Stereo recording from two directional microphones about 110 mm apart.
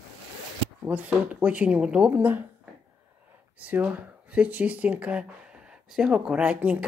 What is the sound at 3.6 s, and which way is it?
Speech, 15° right (ahead or behind).